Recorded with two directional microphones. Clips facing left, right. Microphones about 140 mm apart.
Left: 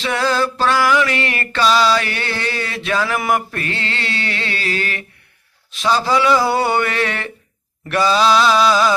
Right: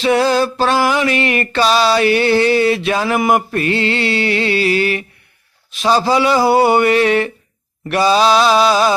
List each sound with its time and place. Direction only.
0.0 s mantra: 20° right (ahead or behind)